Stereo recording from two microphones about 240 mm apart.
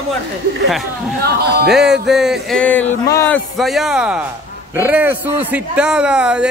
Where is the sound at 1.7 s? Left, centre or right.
Centre.